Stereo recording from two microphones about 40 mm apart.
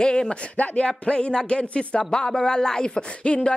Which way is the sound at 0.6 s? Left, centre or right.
Left.